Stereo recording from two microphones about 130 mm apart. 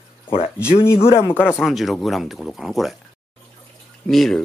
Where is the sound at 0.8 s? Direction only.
20° left (ahead or behind).